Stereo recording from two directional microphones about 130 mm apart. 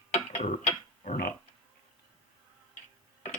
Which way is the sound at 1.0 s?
65° left (ahead or behind).